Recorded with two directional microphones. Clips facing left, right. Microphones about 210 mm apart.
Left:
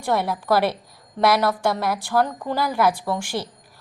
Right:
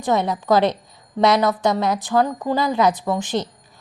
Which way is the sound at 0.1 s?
20° right (ahead or behind).